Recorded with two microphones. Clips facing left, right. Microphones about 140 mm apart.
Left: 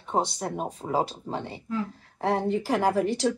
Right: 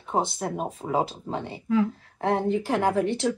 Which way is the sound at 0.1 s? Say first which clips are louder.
Right 1 dB; centre (ahead or behind).